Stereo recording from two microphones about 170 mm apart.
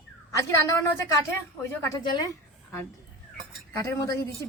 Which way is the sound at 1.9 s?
25° left (ahead or behind).